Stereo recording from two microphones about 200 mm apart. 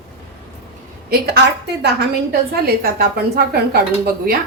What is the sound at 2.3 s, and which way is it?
Speech, 50° right (ahead or behind).